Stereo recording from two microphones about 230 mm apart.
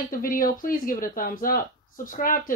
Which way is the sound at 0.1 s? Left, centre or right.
Left.